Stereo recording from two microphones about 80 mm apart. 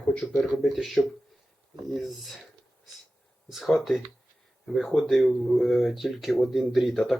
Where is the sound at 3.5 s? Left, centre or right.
Centre.